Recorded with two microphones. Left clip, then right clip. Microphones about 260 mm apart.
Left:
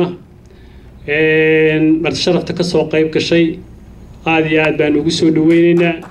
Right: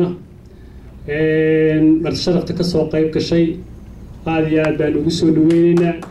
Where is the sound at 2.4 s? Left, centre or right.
Left.